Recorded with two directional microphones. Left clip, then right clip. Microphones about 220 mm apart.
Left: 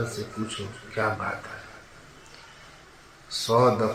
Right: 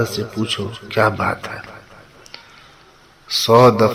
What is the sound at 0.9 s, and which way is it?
Speech, 45° right (ahead or behind).